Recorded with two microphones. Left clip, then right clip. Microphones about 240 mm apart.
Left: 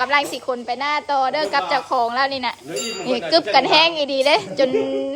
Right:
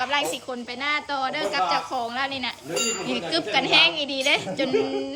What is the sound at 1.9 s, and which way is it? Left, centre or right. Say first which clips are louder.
Speech: left 8 dB; left.